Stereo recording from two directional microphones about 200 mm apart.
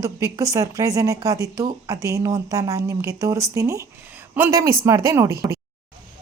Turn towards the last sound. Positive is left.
turn(degrees=-15)  # may be behind; listen again after turning